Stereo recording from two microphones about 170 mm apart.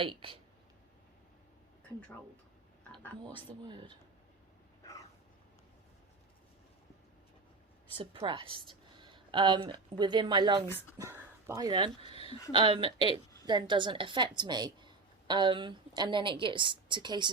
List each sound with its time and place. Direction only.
0.0 s speech: 30° right (ahead or behind)
2.9 s speech: 5° left (ahead or behind)
3.3 s a woman's voice: 30° right (ahead or behind)
4.8 s a sound: 20° left (ahead or behind)
7.9 s speech: 30° right (ahead or behind)
10.9 s speech: 15° right (ahead or behind)
12.1 s a sound: 35° left (ahead or behind)
12.5 s a woman's voice: 30° right (ahead or behind)